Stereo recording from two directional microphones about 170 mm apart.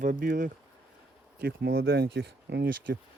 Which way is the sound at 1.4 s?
70° right (ahead or behind).